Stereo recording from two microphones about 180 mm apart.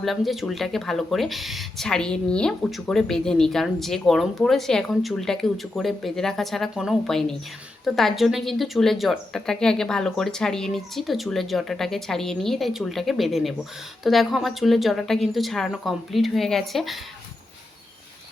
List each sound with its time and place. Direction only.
0.0 s speech: centre (ahead or behind)